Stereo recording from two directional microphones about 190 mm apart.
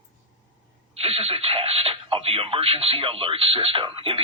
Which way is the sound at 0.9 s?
30° right (ahead or behind).